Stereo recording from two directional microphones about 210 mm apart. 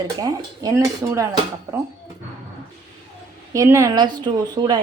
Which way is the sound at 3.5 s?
15° right (ahead or behind).